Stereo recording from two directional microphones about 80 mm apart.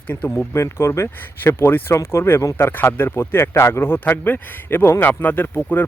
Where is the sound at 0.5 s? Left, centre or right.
Left.